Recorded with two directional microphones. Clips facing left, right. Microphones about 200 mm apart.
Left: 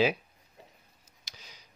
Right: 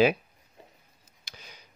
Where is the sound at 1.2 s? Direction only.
55° right (ahead or behind).